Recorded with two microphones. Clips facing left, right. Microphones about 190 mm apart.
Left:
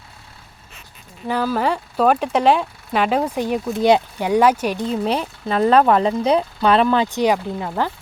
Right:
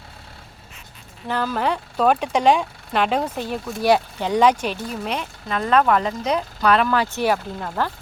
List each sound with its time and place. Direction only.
1.3 s speech: 10° left (ahead or behind)
4.3 s speech: 10° left (ahead or behind)
4.9 s speech: 35° left (ahead or behind); by 7.9 s 10° left (ahead or behind)